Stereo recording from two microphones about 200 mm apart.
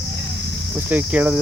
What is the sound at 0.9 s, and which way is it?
Cricket, 10° right (ahead or behind).